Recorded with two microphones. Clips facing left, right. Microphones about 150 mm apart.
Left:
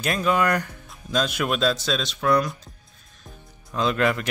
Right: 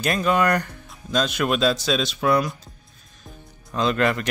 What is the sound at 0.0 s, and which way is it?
Speech, centre (ahead or behind).